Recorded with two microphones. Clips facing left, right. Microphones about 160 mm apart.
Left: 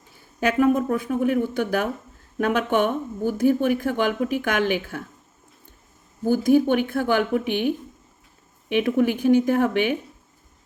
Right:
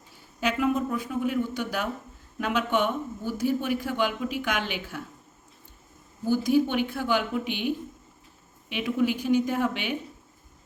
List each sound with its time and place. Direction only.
0.3 s speech: 50° left (ahead or behind)
6.2 s speech: 50° left (ahead or behind)
8.7 s speech: 50° left (ahead or behind)